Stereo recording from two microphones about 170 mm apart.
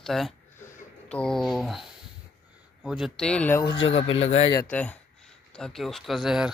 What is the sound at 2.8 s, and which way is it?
Speech, centre (ahead or behind).